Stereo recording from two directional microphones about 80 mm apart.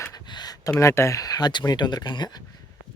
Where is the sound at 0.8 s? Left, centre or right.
Left.